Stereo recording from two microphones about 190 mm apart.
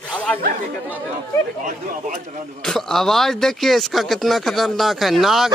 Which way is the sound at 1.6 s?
45° right (ahead or behind).